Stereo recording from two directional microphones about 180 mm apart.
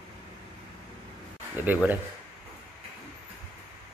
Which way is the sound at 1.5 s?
10° right (ahead or behind).